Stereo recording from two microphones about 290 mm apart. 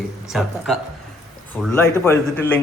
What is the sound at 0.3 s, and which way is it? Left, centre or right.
A man's voice, centre.